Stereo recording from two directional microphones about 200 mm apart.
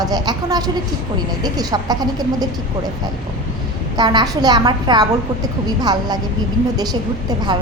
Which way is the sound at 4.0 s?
20° right (ahead or behind).